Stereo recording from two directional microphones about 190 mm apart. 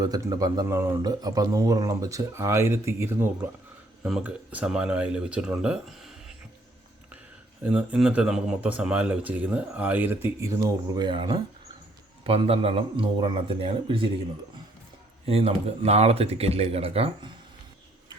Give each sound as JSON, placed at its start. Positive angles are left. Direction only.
{"t": 0.0, "sound": "speech", "side_deg": -20}
{"t": 7.6, "sound": "a man's voice", "side_deg": -5}
{"t": 15.3, "sound": "speech", "side_deg": -30}